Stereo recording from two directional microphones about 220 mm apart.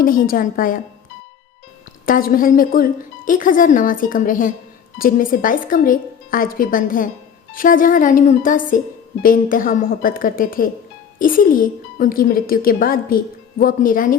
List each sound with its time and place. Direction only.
0.0 s speech: 40° left (ahead or behind)
2.0 s speech: 40° left (ahead or behind)